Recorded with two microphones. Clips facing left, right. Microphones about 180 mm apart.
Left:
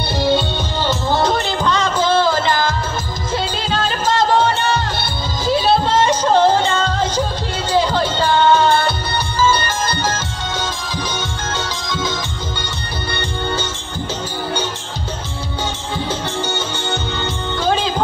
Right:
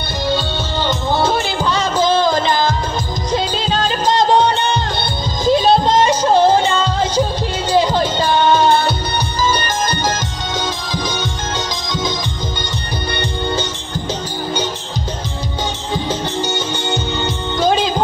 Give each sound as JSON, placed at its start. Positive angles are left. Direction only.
{"t": 0.8, "sound": "music", "side_deg": 0}
{"t": 15.9, "sound": "music", "side_deg": -10}